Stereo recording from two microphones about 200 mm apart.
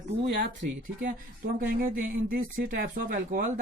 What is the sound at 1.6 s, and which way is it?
Speech, 45° right (ahead or behind).